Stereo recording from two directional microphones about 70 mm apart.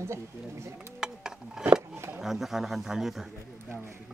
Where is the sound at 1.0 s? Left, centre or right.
Centre.